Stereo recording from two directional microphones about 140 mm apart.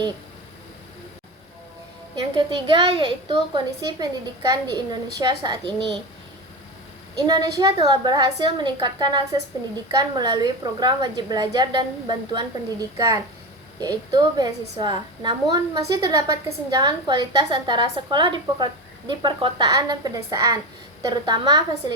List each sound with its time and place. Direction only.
2.1 s a woman's voice: 35° right (ahead or behind)
7.3 s a woman's voice: 30° right (ahead or behind)